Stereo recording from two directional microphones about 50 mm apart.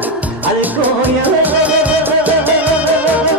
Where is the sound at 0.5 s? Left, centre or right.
Right.